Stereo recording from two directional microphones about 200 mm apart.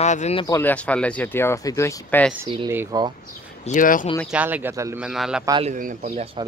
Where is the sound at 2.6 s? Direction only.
15° right (ahead or behind).